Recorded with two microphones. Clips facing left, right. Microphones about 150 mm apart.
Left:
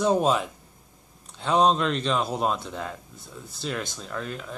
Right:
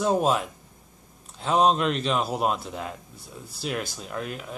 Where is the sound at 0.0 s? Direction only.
5° right (ahead or behind).